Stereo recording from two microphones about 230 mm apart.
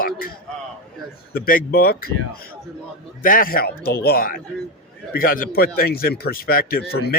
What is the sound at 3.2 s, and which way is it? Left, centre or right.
Speech, left.